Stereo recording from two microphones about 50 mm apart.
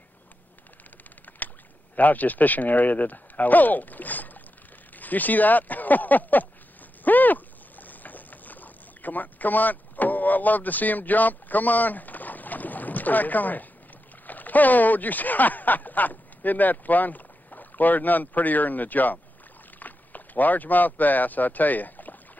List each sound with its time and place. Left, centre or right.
2.0 s speech: left
7.1 s boat: left
14.2 s speech: left